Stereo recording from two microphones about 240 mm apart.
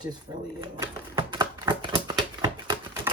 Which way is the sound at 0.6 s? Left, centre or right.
Centre.